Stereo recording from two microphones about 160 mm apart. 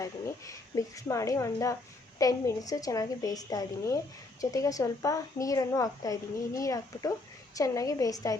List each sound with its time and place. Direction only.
0.0 s a woman's voice: 20° left (ahead or behind)